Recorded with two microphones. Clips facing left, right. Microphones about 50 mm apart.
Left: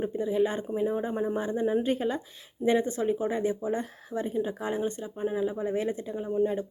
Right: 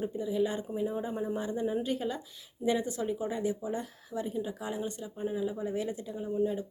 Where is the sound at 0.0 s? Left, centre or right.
Left.